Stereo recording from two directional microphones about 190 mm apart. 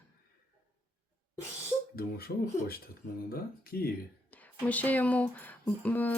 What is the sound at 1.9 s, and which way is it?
Speech, 55° left (ahead or behind).